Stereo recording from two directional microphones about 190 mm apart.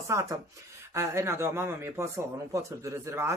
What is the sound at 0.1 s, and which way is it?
Speech, 15° right (ahead or behind).